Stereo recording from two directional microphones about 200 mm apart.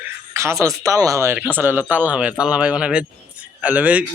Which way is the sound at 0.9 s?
15° right (ahead or behind).